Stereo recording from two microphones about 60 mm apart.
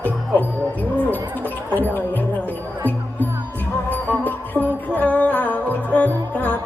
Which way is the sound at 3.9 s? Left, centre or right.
Left.